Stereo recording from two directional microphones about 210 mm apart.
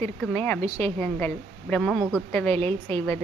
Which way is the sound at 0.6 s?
30° right (ahead or behind).